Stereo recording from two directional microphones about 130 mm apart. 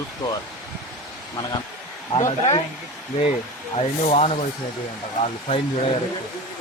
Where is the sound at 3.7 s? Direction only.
55° left (ahead or behind).